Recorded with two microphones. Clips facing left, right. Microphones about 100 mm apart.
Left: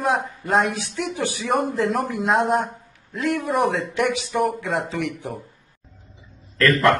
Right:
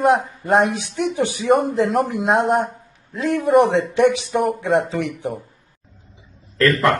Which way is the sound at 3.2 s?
25° right (ahead or behind).